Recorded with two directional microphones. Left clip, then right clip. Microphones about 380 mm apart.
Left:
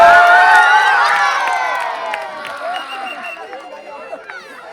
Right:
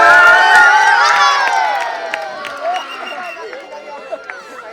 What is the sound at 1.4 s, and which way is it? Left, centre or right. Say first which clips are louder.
Crowd: right 3 dB; right.